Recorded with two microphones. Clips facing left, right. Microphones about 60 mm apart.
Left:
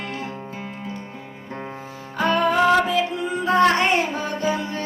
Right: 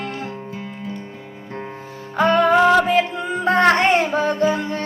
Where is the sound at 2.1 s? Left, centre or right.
Right.